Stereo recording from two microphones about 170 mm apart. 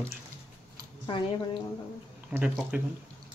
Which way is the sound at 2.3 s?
5° right (ahead or behind).